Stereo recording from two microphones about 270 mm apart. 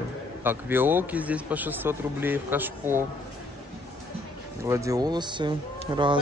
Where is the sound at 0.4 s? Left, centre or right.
Centre.